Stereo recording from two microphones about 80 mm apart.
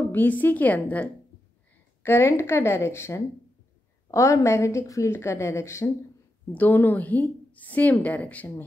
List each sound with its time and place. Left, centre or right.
0.1 s a woman's voice: left
2.0 s a woman's voice: left
6.5 s a woman's voice: left